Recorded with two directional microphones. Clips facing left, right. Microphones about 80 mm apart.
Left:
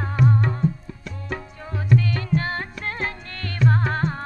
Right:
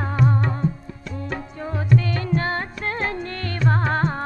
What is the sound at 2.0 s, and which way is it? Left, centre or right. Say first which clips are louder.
Music: right 1 dB; right.